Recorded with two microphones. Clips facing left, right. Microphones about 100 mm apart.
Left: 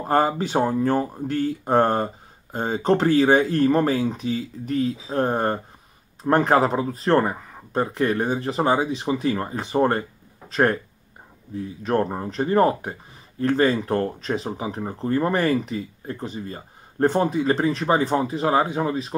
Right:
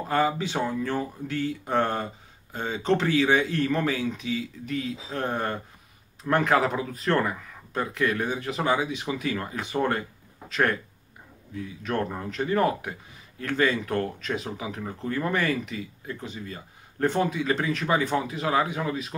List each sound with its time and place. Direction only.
0.0 s speech: 40° left (ahead or behind)